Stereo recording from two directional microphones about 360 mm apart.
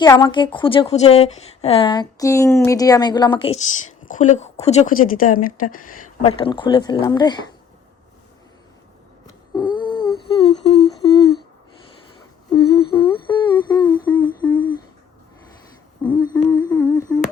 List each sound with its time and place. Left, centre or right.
0.0 s a woman's voice: centre
9.6 s a sound: centre
12.5 s humming: centre
16.0 s humming: centre